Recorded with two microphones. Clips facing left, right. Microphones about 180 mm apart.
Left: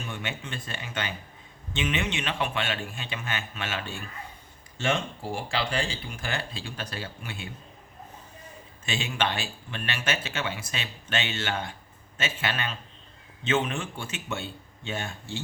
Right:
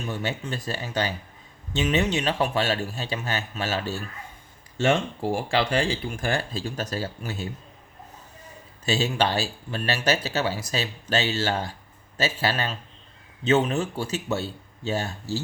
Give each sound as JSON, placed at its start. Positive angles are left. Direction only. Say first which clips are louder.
{"t": 0.0, "sound": "speech", "louder": "right 6 dB", "side_deg": -40}
{"t": 8.8, "sound": "speech", "louder": "right 6 dB", "side_deg": -40}